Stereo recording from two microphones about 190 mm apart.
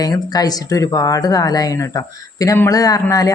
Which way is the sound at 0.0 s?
20° left (ahead or behind).